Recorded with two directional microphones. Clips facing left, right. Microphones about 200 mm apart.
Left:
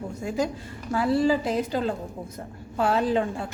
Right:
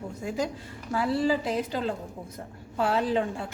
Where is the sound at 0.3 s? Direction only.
45° left (ahead or behind).